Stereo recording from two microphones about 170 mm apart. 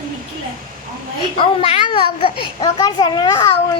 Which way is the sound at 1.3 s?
30° left (ahead or behind).